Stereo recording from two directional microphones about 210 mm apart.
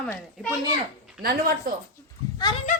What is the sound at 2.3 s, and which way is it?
Speech, 20° left (ahead or behind).